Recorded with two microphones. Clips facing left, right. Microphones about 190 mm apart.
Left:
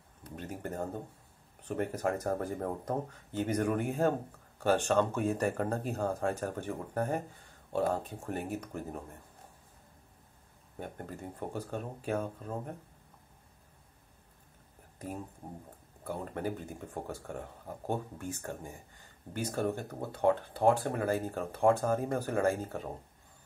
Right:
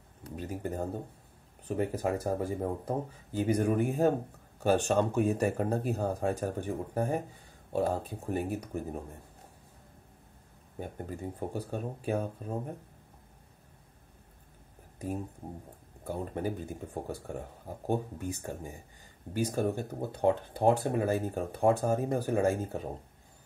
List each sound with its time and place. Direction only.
0.4 s a sound: 10° right (ahead or behind)
1.7 s speech: 10° right (ahead or behind)
10.8 s speech: 15° right (ahead or behind)
16.0 s speech: 15° right (ahead or behind)